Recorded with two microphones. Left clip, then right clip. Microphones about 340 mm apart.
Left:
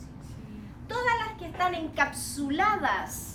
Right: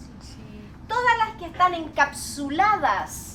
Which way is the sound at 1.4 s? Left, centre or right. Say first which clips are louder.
Right 7 dB; centre.